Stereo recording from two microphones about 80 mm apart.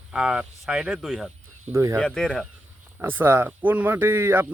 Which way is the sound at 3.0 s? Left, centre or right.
Right.